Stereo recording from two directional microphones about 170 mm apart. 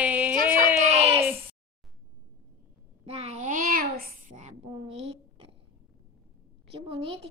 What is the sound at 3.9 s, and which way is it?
A child's voice, 55° right (ahead or behind).